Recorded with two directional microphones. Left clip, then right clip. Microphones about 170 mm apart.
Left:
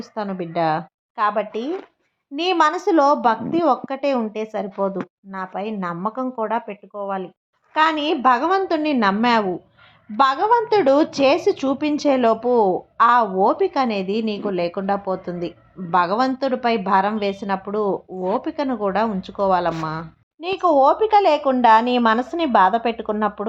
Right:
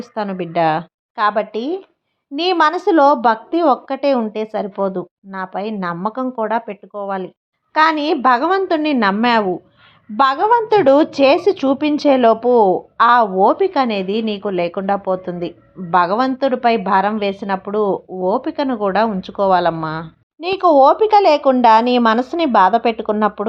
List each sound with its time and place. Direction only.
0.0 s a woman's voice: 20° right (ahead or behind)